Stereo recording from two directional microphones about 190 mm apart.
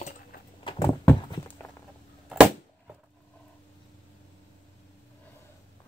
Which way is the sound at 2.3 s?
5° right (ahead or behind).